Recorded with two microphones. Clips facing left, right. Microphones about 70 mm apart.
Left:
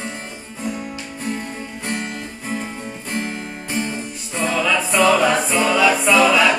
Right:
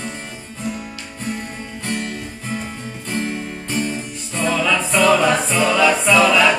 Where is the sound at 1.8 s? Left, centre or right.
Centre.